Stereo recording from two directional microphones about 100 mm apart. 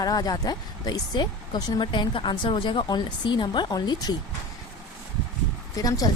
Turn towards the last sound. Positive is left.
turn(degrees=35)  # may be behind; listen again after turning